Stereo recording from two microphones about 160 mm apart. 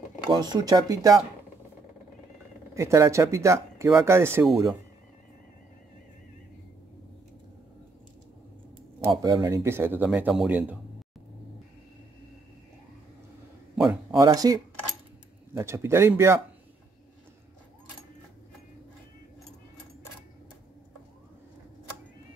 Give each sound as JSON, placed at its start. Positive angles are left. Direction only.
{"t": 0.3, "sound": "speech", "side_deg": -25}
{"t": 2.7, "sound": "speech", "side_deg": -20}
{"t": 9.2, "sound": "speech", "side_deg": -25}
{"t": 14.1, "sound": "speech", "side_deg": -25}